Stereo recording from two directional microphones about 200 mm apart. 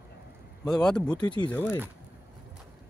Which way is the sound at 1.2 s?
25° left (ahead or behind).